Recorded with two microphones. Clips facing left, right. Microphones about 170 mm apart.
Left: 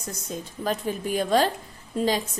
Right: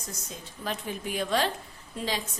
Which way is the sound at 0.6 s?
40° left (ahead or behind).